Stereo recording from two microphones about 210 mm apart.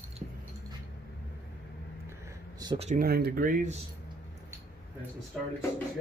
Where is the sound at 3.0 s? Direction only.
45° right (ahead or behind).